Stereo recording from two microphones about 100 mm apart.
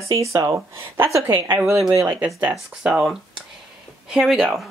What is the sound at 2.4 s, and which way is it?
Speech, 10° right (ahead or behind).